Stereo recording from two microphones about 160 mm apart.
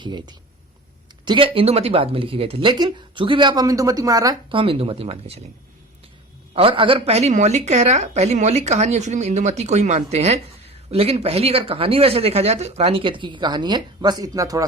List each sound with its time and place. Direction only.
0.0 s speech: 30° right (ahead or behind)
4.5 s speech: 35° right (ahead or behind)
6.5 s a woman's voice: 35° right (ahead or behind)